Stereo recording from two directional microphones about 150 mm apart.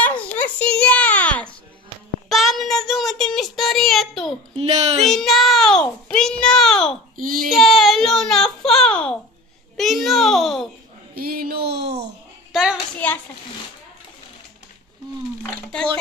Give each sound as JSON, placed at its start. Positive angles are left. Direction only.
{"t": 0.0, "sound": "a sound", "side_deg": 10}
{"t": 2.2, "sound": "child singing", "side_deg": 0}
{"t": 4.6, "sound": "a woman's voice", "side_deg": -45}
{"t": 5.0, "sound": "child singing", "side_deg": 0}
{"t": 7.2, "sound": "a sound", "side_deg": -65}
{"t": 7.5, "sound": "baby cry", "side_deg": 0}
{"t": 9.8, "sound": "babbling", "side_deg": 0}
{"t": 11.1, "sound": "a sound", "side_deg": -80}
{"t": 12.5, "sound": "hands", "side_deg": -5}